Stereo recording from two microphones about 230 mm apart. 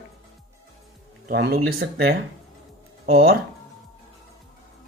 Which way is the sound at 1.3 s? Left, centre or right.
Right.